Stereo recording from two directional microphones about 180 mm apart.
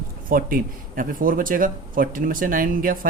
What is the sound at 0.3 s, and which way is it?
Speech, 50° right (ahead or behind).